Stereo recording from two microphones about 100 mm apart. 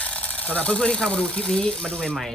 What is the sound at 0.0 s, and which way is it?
Speech, 15° left (ahead or behind).